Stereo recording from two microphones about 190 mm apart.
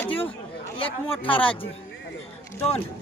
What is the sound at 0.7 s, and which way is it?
Speech, 25° left (ahead or behind).